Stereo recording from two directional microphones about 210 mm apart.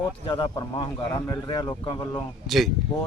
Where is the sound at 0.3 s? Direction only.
20° left (ahead or behind).